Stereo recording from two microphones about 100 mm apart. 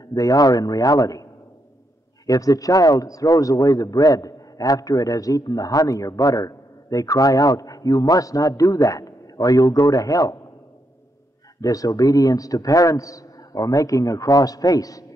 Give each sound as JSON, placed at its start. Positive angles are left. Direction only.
{"t": 0.1, "sound": "a man's voice", "side_deg": 35}
{"t": 2.2, "sound": "a man's voice", "side_deg": 35}
{"t": 11.6, "sound": "a man's voice", "side_deg": 35}